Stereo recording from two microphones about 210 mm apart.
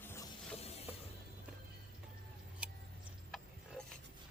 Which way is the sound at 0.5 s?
30° left (ahead or behind).